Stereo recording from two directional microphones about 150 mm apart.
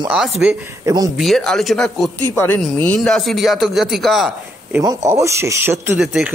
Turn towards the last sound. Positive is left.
turn(degrees=0)  # may be behind; listen again after turning